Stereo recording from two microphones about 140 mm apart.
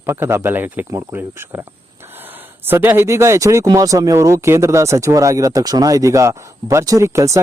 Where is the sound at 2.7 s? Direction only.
15° right (ahead or behind).